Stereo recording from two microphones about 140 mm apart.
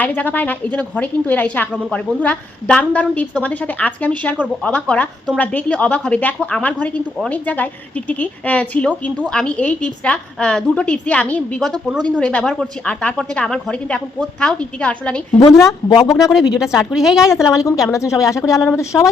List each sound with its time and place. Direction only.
0.0 s a woman's voice: 10° left (ahead or behind)
15.4 s speech: 25° left (ahead or behind)
16.3 s speech: 5° right (ahead or behind)
17.2 s speech: 20° left (ahead or behind)